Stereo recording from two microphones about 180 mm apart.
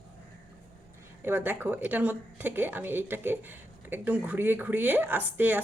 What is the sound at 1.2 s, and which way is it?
A woman's voice, 10° right (ahead or behind).